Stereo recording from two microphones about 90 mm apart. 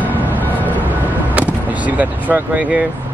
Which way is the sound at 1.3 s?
15° right (ahead or behind).